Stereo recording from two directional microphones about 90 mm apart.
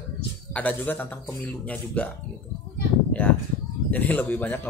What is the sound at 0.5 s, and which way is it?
Speech, 15° left (ahead or behind).